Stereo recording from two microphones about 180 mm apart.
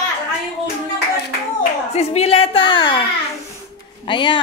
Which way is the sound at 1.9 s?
35° left (ahead or behind).